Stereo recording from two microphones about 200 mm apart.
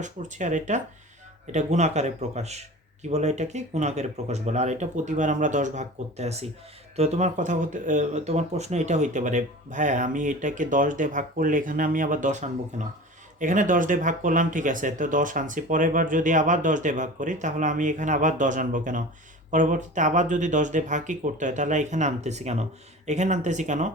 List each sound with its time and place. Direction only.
0.0 s speech: 40° right (ahead or behind)